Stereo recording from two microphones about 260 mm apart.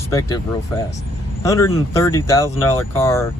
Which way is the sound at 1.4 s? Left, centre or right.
Centre.